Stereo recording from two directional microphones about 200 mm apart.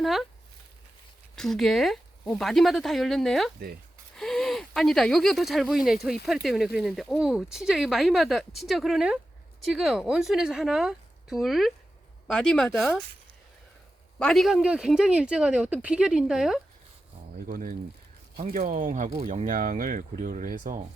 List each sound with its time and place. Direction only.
0.0 s speech: centre (ahead or behind)
1.4 s speech: centre (ahead or behind)
14.2 s speech: centre (ahead or behind)
17.3 s speech: 45° right (ahead or behind)